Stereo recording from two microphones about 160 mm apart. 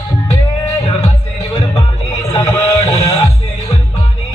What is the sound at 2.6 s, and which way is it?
Music, 20° left (ahead or behind).